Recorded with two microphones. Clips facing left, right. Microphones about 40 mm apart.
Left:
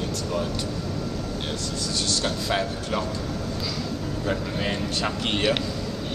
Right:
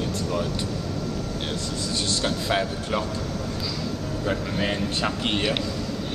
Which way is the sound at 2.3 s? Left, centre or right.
Centre.